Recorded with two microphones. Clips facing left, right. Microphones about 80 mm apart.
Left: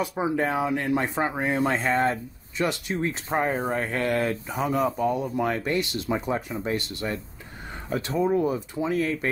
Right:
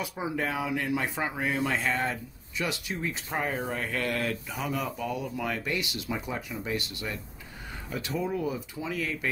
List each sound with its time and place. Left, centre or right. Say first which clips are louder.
0.0 s speech: left 6 dB; left